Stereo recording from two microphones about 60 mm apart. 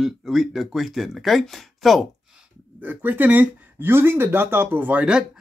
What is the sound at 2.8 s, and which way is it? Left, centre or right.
Speech, right.